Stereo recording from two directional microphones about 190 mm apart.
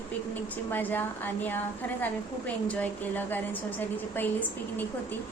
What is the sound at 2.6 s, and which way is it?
A woman's voice, 10° left (ahead or behind).